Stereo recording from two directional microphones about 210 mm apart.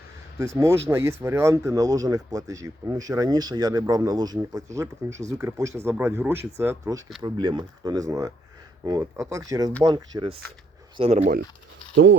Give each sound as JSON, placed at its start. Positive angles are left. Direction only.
{"t": 0.3, "sound": "speech", "side_deg": -15}
{"t": 10.9, "sound": "speech", "side_deg": -30}